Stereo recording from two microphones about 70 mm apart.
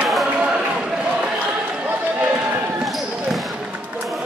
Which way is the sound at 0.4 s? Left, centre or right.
Centre.